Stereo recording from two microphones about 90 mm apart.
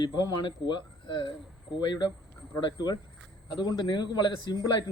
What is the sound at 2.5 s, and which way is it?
Speech, 50° left (ahead or behind).